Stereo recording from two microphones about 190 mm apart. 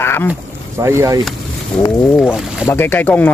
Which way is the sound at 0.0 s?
10° left (ahead or behind).